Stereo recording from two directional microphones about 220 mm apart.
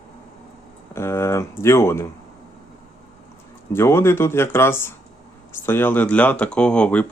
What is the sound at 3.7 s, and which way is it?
Speech, 10° left (ahead or behind).